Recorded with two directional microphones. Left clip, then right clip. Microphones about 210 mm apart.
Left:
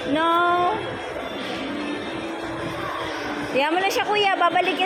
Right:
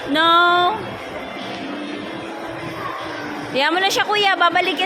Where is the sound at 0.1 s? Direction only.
20° right (ahead or behind).